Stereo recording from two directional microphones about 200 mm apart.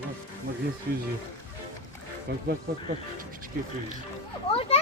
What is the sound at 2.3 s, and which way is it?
Speech, 55° right (ahead or behind).